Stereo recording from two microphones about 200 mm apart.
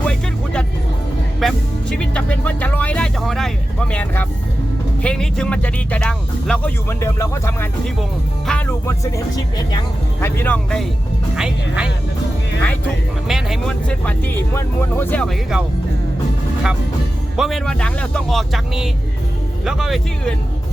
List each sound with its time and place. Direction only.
0.0 s music: 5° left (ahead or behind)
1.4 s speech: centre (ahead or behind)
13.2 s speech: centre (ahead or behind)
17.3 s speech: centre (ahead or behind)